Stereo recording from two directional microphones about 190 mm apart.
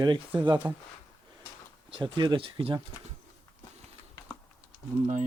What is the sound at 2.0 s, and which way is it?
Speech, 25° right (ahead or behind).